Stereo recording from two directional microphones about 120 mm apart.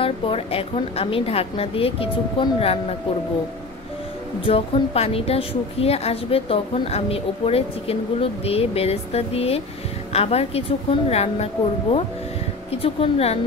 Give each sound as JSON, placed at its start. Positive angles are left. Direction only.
{"t": 0.0, "sound": "a woman's voice", "side_deg": 50}
{"t": 4.5, "sound": "a woman's voice", "side_deg": 55}
{"t": 12.7, "sound": "a woman's voice", "side_deg": 50}